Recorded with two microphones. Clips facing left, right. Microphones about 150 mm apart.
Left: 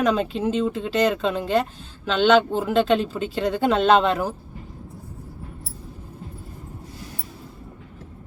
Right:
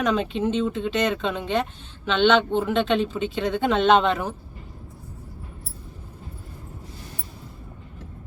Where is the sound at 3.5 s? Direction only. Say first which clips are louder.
Left 3 dB; 35° left (ahead or behind).